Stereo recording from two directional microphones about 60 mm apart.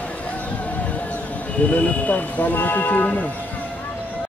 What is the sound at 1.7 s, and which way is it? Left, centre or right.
Speech, left.